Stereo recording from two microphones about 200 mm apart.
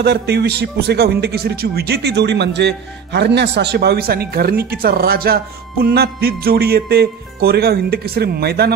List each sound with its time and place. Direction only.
0.0 s a man's voice: 55° right (ahead or behind)